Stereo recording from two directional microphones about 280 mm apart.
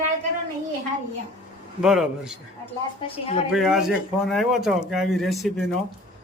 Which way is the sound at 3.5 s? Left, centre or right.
Centre.